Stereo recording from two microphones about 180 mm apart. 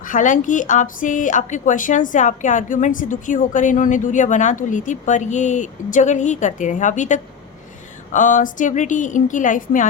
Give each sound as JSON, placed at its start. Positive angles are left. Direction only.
{"t": 0.0, "sound": "speech", "side_deg": 45}